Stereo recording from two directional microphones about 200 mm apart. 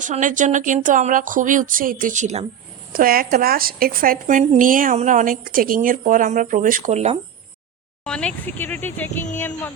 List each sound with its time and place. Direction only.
0.0 s speech: 40° right (ahead or behind)
2.9 s a woman's voice: 45° right (ahead or behind)
8.0 s speech: 5° left (ahead or behind)